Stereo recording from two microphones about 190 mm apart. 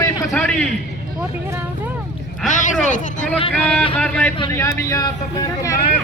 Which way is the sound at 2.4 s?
40° left (ahead or behind).